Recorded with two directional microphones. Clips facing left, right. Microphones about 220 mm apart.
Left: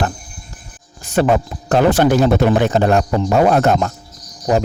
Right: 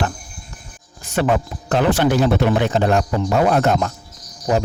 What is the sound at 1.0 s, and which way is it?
A man's voice, 35° left (ahead or behind).